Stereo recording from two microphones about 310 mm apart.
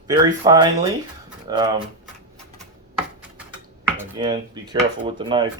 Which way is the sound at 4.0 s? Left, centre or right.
Centre.